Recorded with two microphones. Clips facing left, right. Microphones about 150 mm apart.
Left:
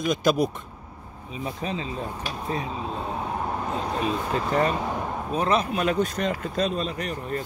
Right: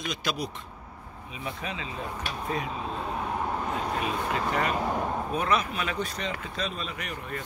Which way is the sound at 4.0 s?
35° left (ahead or behind).